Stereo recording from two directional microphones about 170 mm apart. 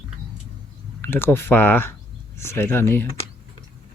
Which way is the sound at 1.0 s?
10° left (ahead or behind).